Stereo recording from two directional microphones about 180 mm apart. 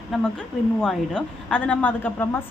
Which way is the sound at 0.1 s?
5° left (ahead or behind).